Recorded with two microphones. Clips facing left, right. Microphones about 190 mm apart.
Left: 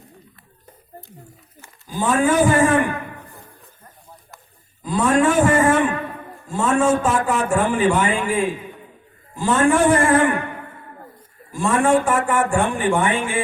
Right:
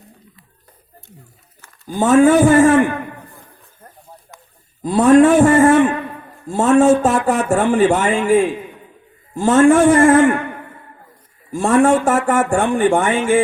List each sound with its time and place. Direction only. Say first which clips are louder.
2.0 s a man's voice: right 7 dB; 40° right (ahead or behind)
4.8 s a man's voice: right 8 dB; 40° right (ahead or behind)
11.5 s speech: right 4 dB; 45° right (ahead or behind)